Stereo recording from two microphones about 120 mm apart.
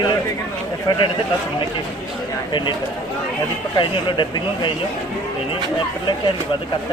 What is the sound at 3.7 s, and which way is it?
Speech, 40° left (ahead or behind).